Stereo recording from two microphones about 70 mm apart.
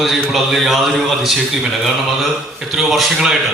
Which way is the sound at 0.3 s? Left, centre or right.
Centre.